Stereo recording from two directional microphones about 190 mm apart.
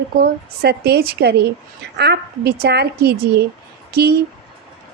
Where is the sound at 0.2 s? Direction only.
55° right (ahead or behind).